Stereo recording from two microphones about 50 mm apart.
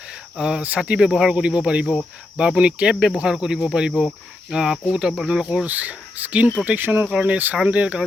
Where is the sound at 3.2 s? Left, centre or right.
Centre.